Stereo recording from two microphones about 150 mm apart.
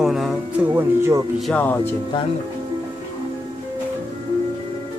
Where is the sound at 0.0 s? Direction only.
Centre (ahead or behind).